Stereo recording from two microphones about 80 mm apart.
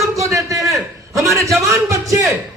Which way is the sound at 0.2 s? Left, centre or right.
Right.